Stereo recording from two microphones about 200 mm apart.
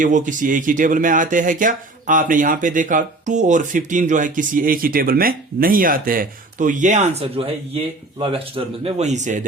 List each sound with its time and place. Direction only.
0.0 s speech: 40° right (ahead or behind)